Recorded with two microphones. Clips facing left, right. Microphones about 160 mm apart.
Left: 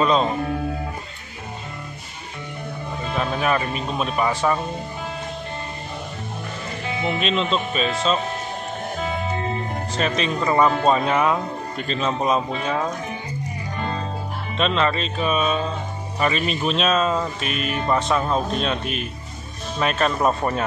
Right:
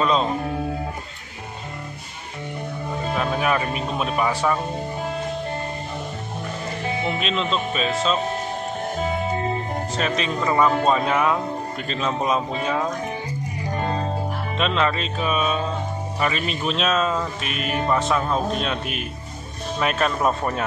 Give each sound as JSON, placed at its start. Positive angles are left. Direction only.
{"t": 0.0, "sound": "speech", "side_deg": 0}
{"t": 3.3, "sound": "speech", "side_deg": -5}
{"t": 7.2, "sound": "speech", "side_deg": 0}
{"t": 9.9, "sound": "speech", "side_deg": 0}
{"t": 13.7, "sound": "music", "side_deg": -45}
{"t": 14.6, "sound": "speech", "side_deg": -5}